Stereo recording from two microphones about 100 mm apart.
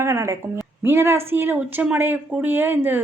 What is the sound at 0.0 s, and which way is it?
A woman's voice, 30° right (ahead or behind).